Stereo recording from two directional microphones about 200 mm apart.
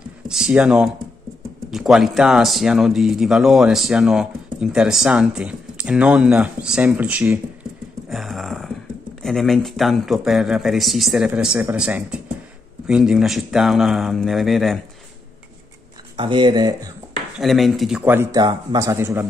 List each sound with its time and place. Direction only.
0.3 s speech: 5° right (ahead or behind)
8.1 s a sound: centre (ahead or behind)
9.2 s speech: centre (ahead or behind)
16.2 s speech: 25° right (ahead or behind)
17.4 s speech: centre (ahead or behind)
18.4 s speech: 20° right (ahead or behind)